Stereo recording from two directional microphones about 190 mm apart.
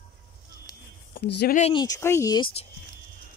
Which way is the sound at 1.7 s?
20° left (ahead or behind).